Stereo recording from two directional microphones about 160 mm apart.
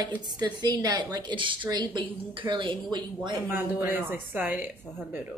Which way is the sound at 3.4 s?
15° right (ahead or behind).